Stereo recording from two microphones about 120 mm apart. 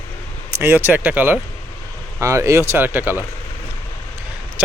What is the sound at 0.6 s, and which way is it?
Speech, 15° right (ahead or behind).